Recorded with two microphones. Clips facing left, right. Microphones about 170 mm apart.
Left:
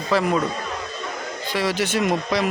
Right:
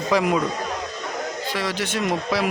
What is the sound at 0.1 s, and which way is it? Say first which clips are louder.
Speech: even; 15° right (ahead or behind).